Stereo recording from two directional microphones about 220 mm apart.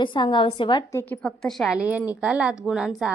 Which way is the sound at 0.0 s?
20° left (ahead or behind).